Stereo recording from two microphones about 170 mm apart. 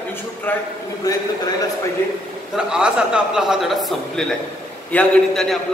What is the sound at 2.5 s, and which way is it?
A man's voice, 5° right (ahead or behind).